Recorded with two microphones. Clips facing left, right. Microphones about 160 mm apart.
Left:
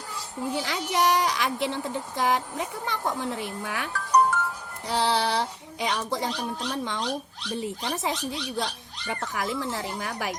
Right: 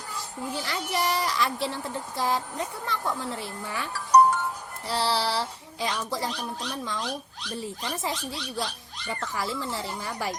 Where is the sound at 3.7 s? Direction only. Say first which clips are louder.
Left 1 dB; 70° left (ahead or behind).